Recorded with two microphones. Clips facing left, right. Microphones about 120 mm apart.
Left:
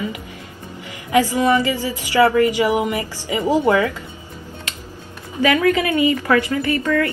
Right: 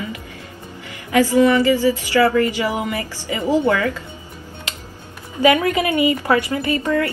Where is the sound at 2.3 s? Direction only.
15° left (ahead or behind).